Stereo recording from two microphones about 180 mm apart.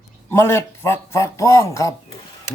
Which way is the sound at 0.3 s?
15° left (ahead or behind).